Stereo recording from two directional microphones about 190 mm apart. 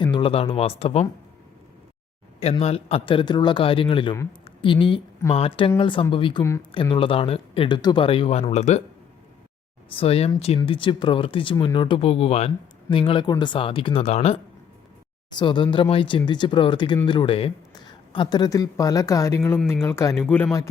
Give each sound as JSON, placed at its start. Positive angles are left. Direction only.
{"t": 0.0, "sound": "speech", "side_deg": 25}
{"t": 2.4, "sound": "speech", "side_deg": 35}
{"t": 6.4, "sound": "speech", "side_deg": 15}
{"t": 6.7, "sound": "speech", "side_deg": 25}
{"t": 9.9, "sound": "speech", "side_deg": 30}